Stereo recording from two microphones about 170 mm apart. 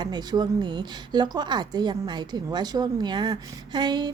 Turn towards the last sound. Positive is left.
turn(degrees=-25)  # may be behind; listen again after turning